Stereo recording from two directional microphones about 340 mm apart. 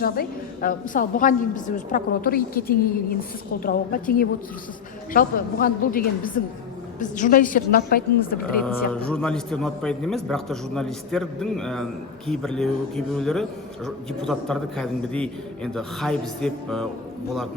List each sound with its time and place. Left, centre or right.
0.0 s a woman's voice: left
8.9 s a man's voice: centre